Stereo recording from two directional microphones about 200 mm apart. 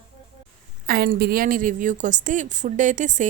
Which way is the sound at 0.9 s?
50° right (ahead or behind).